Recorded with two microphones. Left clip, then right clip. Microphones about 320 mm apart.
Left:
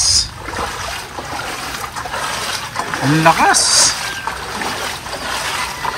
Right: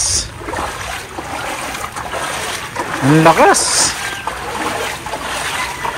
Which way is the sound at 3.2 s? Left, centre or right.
Centre.